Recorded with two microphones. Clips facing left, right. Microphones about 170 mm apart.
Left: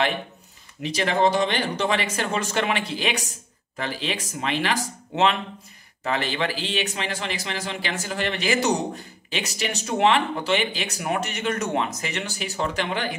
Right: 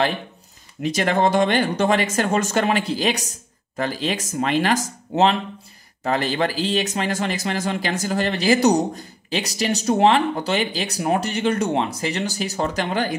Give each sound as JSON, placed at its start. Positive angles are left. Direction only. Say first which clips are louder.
{"t": 0.8, "sound": "speech", "louder": "right 2 dB", "side_deg": -50}